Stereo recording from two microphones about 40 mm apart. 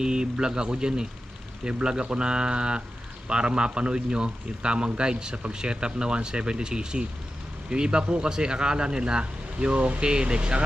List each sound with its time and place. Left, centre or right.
0.0 s speech: right